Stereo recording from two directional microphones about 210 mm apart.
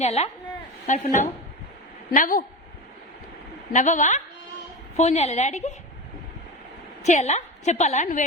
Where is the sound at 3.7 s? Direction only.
35° left (ahead or behind).